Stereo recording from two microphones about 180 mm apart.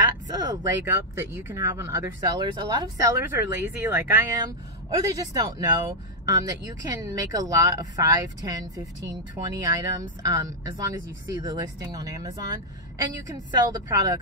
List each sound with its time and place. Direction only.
0.3 s speech: 15° right (ahead or behind)